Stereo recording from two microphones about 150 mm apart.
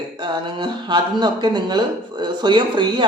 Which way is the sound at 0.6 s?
30° right (ahead or behind).